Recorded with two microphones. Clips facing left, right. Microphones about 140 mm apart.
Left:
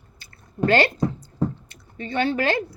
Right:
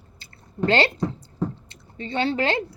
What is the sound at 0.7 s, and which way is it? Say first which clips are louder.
Speech: left 2 dB; 25° right (ahead or behind).